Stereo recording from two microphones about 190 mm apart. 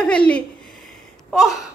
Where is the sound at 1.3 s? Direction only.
Centre (ahead or behind).